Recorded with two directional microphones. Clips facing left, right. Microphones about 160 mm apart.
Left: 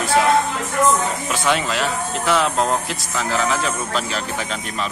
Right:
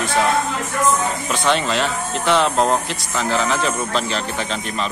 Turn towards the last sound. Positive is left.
turn(degrees=5)  # may be behind; listen again after turning